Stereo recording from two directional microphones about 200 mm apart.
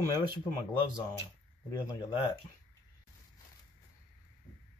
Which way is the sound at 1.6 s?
20° left (ahead or behind).